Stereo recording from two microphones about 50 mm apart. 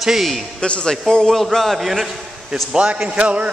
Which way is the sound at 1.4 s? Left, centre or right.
Centre.